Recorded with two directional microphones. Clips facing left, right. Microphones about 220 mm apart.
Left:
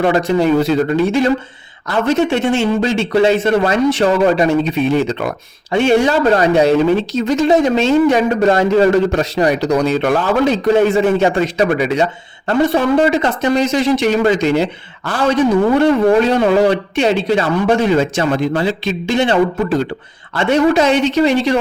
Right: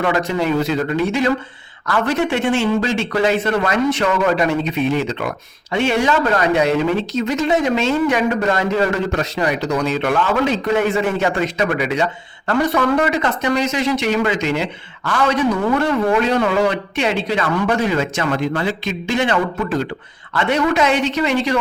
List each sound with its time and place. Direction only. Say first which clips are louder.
0.0 s a man's voice: left 5 dB; 35° left (ahead or behind)
1.9 s a man's voice: left 4 dB; 20° left (ahead or behind)